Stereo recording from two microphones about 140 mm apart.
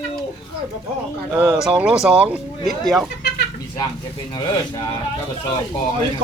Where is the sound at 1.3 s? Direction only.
10° right (ahead or behind).